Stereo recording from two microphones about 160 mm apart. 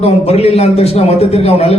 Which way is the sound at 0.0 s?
40° left (ahead or behind).